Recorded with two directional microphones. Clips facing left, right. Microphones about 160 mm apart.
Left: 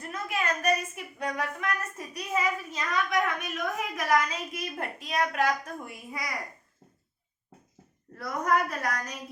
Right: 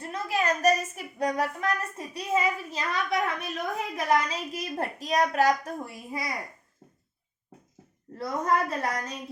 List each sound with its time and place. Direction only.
0.0 s a sound: 30° right (ahead or behind)
2.0 s a woman's voice: 25° right (ahead or behind)
8.1 s a woman's voice: 25° right (ahead or behind)